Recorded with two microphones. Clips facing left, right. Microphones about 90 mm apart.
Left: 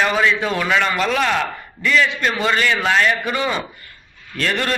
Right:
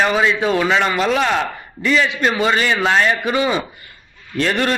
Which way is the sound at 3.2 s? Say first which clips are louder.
Right 3 dB; 10° right (ahead or behind).